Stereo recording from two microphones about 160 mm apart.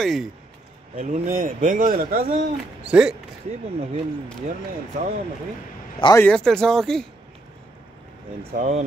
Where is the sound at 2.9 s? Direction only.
5° right (ahead or behind).